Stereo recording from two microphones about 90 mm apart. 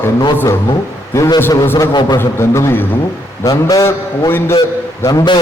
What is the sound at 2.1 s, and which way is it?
A man's voice, 30° left (ahead or behind).